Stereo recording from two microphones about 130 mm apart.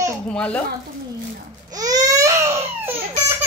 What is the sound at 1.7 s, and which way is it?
Baby cry, 30° right (ahead or behind).